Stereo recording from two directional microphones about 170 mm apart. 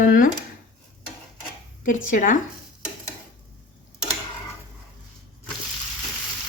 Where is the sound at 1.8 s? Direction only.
50° left (ahead or behind).